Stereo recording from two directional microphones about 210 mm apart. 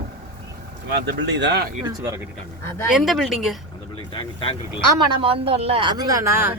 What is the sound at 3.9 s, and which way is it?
Speech, 25° left (ahead or behind).